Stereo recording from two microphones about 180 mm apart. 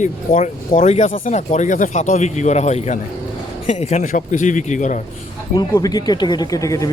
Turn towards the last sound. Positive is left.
turn(degrees=20)  # may be behind; listen again after turning